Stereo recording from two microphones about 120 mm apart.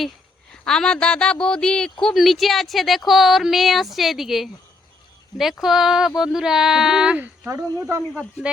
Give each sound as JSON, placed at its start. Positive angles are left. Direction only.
{"t": 0.5, "sound": "speech", "side_deg": 5}
{"t": 7.5, "sound": "speech", "side_deg": -25}